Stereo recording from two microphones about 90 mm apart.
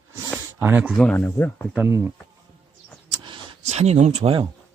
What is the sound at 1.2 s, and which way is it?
Speech, 25° left (ahead or behind).